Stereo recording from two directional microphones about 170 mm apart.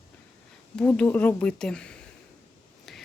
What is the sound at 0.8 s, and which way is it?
Speech, 10° left (ahead or behind).